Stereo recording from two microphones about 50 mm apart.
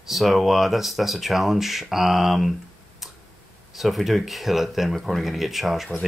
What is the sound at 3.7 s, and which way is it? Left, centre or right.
Speech, centre.